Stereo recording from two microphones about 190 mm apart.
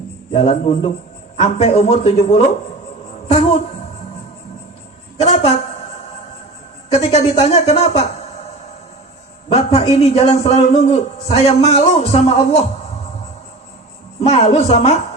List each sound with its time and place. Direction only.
0.3 s a man's voice: 35° left (ahead or behind)
3.2 s a sound: 35° left (ahead or behind)
5.2 s a man's voice: 30° left (ahead or behind)
7.0 s a man's voice: 30° left (ahead or behind)
9.5 s a man's voice: 30° left (ahead or behind)
14.2 s a man's voice: 35° left (ahead or behind)